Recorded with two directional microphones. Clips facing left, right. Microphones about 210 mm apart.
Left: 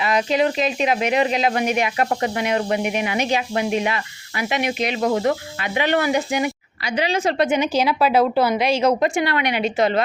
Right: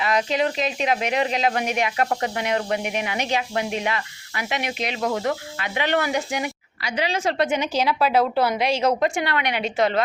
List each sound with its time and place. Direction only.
0.0 s speech: 5° left (ahead or behind)
4.9 s speech: 35° left (ahead or behind)
5.2 s speech: 15° left (ahead or behind)
6.8 s a woman's voice: 20° left (ahead or behind)